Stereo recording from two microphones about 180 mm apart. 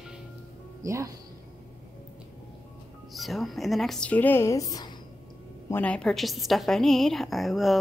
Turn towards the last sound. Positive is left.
turn(degrees=0)  # may be behind; listen again after turning